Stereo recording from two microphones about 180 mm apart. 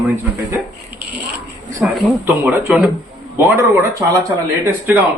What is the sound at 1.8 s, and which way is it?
Speech, 5° right (ahead or behind).